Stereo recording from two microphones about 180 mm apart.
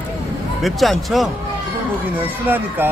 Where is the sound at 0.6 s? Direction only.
Centre (ahead or behind).